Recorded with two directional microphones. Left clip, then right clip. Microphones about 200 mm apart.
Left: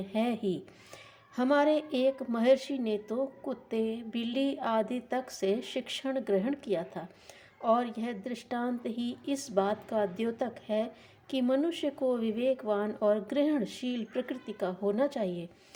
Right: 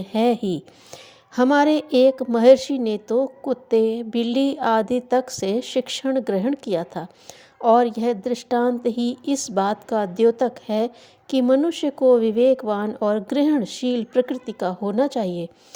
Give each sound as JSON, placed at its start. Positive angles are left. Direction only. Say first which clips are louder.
{"t": 0.0, "sound": "a woman's voice", "louder": "right 11 dB", "side_deg": -45}